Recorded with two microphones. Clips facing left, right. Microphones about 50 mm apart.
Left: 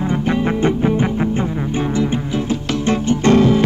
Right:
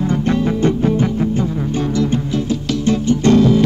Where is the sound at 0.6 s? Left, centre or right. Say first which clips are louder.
Right 1 dB; left.